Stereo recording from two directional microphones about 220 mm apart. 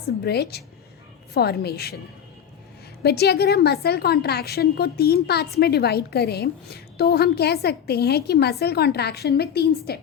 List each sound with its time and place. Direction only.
0.3 s a woman's voice: 45° left (ahead or behind)
3.0 s a woman's voice: 45° left (ahead or behind)